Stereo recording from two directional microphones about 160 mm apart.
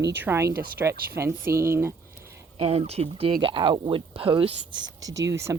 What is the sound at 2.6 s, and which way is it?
Speech, 40° right (ahead or behind).